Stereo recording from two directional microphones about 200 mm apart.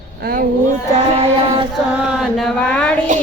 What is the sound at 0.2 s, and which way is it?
Speech, 50° right (ahead or behind).